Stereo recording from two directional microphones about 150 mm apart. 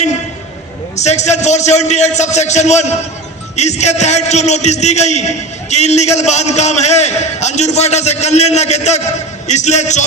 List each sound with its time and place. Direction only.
0.9 s a man's voice: 50° left (ahead or behind)